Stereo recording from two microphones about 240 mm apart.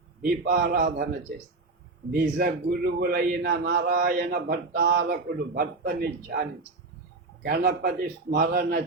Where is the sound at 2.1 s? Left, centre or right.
Right.